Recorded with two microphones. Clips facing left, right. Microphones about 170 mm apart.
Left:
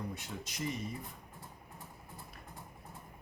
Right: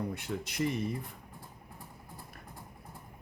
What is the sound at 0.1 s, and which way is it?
Speech, 65° right (ahead or behind).